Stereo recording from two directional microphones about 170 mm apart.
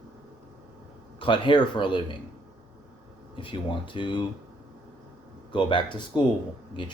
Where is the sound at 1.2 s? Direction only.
30° left (ahead or behind).